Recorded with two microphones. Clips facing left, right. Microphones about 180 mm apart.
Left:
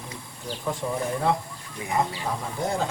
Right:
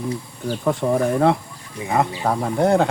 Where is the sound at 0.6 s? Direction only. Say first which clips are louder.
Right 9 dB; 65° right (ahead or behind).